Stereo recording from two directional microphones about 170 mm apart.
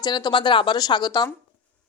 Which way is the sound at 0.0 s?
25° left (ahead or behind).